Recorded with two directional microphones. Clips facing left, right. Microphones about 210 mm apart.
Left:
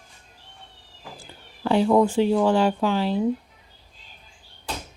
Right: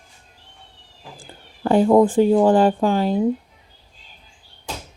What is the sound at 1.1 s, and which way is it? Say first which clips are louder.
Speech: right 1 dB; 50° right (ahead or behind).